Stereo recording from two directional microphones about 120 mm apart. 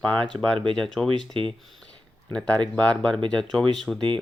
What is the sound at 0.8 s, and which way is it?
Speech, 5° left (ahead or behind).